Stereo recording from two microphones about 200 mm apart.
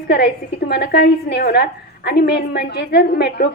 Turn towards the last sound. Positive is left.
turn(degrees=55)  # may be behind; listen again after turning